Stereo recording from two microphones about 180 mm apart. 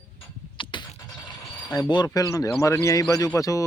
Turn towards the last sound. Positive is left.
turn(degrees=20)  # may be behind; listen again after turning